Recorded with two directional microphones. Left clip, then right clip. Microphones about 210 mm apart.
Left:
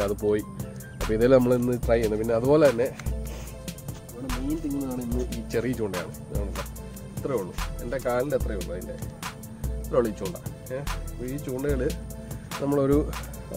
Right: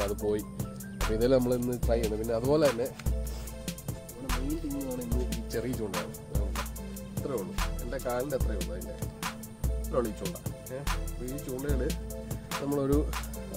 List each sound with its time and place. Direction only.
0.0 s speech: centre (ahead or behind)
4.3 s music: centre (ahead or behind)
5.5 s music: 15° left (ahead or behind)
5.9 s music: centre (ahead or behind)
8.0 s music: 15° left (ahead or behind)
9.8 s speech: 15° left (ahead or behind)
11.3 s speech: centre (ahead or behind)
11.6 s music: 15° left (ahead or behind)
12.9 s music: centre (ahead or behind)